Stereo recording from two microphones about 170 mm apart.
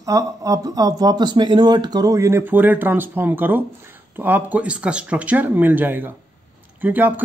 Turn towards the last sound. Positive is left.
turn(degrees=-10)  # may be behind; listen again after turning